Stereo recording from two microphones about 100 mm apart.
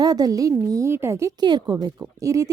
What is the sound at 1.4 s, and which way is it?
A woman's voice, 45° right (ahead or behind).